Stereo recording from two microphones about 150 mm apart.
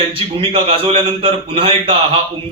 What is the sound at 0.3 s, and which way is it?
Speech, 40° right (ahead or behind).